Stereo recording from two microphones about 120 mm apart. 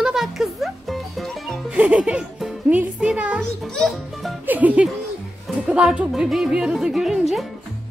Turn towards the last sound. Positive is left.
turn(degrees=-5)  # may be behind; listen again after turning